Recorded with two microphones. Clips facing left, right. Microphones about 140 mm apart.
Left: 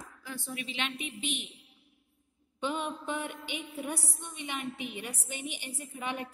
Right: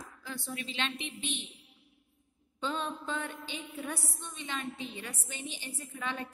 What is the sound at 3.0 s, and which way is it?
A woman's voice, 15° left (ahead or behind).